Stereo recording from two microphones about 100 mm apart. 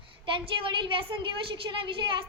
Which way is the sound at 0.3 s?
60° right (ahead or behind).